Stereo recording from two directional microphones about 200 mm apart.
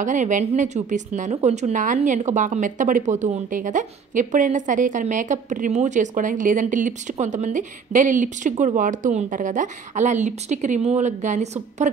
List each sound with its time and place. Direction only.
0.0 s a woman's voice: 40° right (ahead or behind)